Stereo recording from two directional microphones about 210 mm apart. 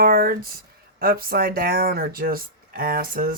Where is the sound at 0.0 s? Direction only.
45° right (ahead or behind).